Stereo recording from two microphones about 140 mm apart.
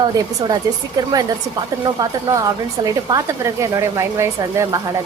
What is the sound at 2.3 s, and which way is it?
Speech, 25° right (ahead or behind).